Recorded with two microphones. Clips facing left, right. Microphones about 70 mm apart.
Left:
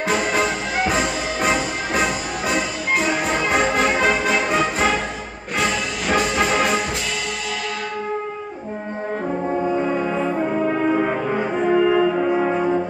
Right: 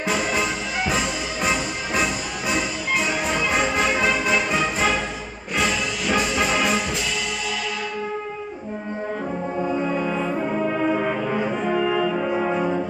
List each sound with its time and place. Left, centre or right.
0.1 s music: left
9.5 s brass instrument: left